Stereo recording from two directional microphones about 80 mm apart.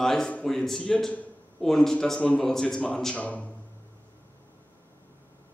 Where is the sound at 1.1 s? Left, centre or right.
Centre.